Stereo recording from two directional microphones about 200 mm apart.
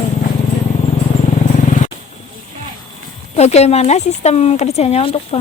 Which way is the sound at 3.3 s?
35° left (ahead or behind).